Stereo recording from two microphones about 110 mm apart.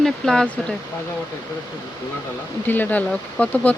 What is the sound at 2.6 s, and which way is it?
Speech, 15° left (ahead or behind).